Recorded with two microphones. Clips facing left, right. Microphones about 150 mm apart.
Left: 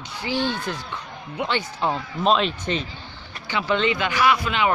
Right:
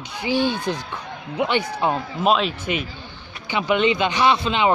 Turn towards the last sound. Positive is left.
turn(degrees=-25)  # may be behind; listen again after turning